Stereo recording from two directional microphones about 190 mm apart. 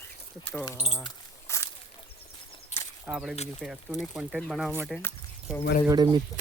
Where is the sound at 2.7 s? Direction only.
35° left (ahead or behind).